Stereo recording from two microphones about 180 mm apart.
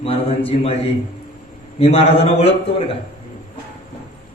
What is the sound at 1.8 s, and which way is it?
A man's voice, 35° left (ahead or behind).